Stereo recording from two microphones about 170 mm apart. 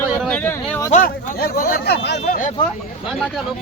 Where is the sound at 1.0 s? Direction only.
60° left (ahead or behind); by 2.2 s 90° left.